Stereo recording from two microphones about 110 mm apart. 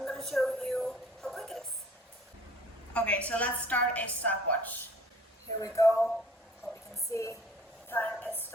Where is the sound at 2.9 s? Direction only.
10° left (ahead or behind).